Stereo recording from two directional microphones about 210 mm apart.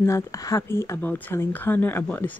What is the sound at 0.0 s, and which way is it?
Speech, 15° left (ahead or behind).